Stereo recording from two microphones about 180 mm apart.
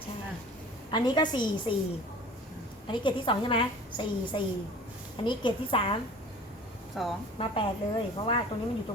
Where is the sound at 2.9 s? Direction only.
25° left (ahead or behind).